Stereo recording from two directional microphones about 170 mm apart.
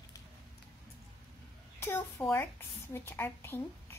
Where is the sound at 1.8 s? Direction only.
15° left (ahead or behind).